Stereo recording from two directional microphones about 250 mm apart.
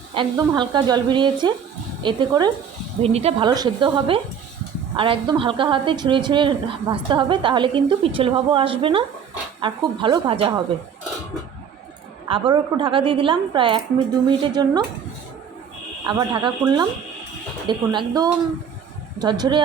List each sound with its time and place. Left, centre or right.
0.1 s a woman's voice: centre
12.3 s a woman's voice: centre
16.0 s speech: centre